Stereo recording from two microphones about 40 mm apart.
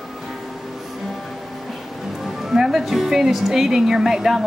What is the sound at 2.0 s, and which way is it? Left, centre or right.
Speech, centre.